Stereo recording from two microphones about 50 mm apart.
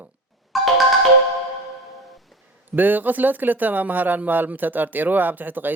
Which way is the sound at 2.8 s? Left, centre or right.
Right.